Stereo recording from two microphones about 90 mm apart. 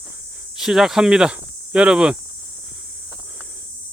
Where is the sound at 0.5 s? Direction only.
5° right (ahead or behind).